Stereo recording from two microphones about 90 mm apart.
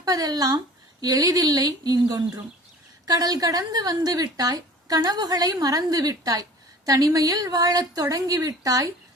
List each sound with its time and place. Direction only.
0.0 s a woman's voice: 45° right (ahead or behind)